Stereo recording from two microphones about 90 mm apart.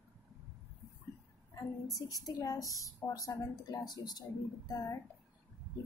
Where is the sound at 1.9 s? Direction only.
40° left (ahead or behind).